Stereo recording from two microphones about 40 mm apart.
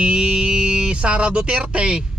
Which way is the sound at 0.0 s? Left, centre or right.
Right.